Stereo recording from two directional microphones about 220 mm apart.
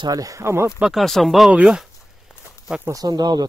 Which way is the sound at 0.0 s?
15° right (ahead or behind).